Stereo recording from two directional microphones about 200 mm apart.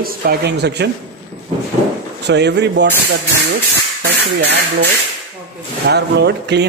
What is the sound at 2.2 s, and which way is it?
Speech, 60° right (ahead or behind).